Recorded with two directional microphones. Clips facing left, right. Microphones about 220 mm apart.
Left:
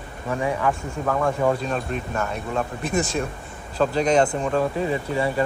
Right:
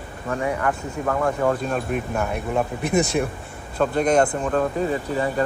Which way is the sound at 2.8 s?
65° right (ahead or behind).